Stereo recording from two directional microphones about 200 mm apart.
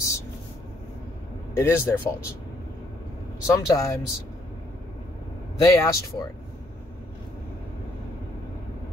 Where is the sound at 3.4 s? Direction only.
15° left (ahead or behind).